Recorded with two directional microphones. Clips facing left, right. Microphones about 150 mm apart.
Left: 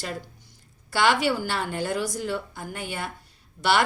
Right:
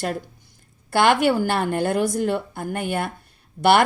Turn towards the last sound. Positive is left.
turn(degrees=-55)  # may be behind; listen again after turning